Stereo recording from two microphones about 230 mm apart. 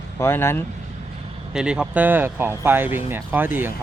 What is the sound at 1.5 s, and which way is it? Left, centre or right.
Speech, centre.